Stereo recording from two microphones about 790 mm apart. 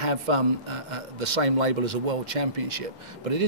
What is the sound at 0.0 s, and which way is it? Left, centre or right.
A man's voice, right.